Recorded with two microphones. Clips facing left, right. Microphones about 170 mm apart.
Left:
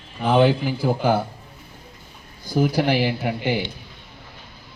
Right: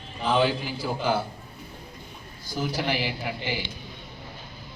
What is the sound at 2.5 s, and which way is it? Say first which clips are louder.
Speech: left 8 dB; 55° left (ahead or behind).